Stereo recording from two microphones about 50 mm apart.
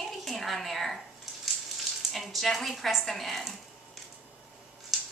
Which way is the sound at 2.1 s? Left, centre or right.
Centre.